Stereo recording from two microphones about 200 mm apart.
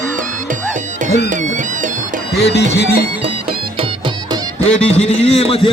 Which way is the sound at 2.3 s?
55° left (ahead or behind).